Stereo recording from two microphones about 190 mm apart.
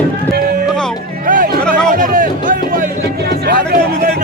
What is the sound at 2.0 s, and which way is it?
Music, 45° right (ahead or behind).